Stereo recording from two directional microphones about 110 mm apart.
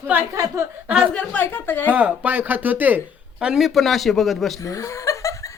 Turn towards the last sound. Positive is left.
turn(degrees=30)  # may be behind; listen again after turning